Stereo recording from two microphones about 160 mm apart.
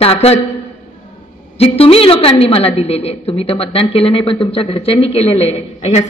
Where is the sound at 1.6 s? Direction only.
35° left (ahead or behind).